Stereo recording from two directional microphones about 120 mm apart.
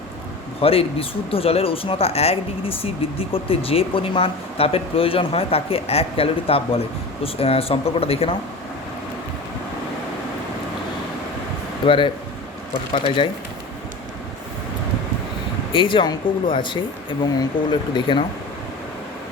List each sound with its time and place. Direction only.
0.6 s speech: 55° left (ahead or behind)
11.9 s speech: 45° left (ahead or behind)
15.7 s speech: 45° left (ahead or behind)